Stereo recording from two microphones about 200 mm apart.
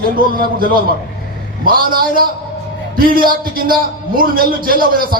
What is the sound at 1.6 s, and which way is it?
A man's voice, 45° right (ahead or behind).